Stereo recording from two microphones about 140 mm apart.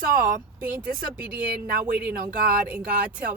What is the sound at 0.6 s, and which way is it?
Speech, 10° right (ahead or behind).